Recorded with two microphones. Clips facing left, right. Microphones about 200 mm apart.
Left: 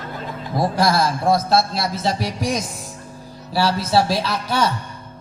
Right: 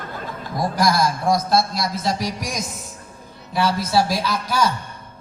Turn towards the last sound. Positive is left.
turn(degrees=30)  # may be behind; listen again after turning